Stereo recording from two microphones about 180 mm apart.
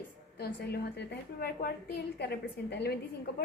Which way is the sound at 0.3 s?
60° left (ahead or behind).